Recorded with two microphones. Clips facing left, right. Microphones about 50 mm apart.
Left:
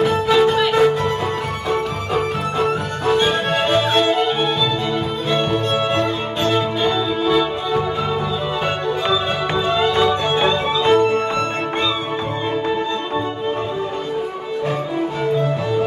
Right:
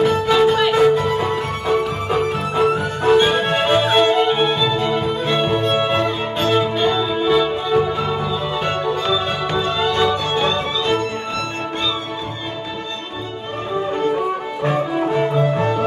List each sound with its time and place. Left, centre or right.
0.0 s music: centre
9.6 s music: centre
10.3 s music: centre